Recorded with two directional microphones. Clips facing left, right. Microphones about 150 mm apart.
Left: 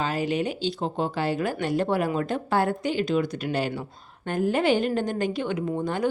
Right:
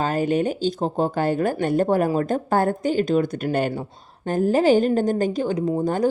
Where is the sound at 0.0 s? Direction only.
50° right (ahead or behind).